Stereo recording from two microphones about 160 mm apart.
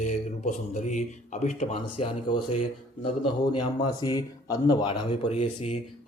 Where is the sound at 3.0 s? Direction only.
30° left (ahead or behind).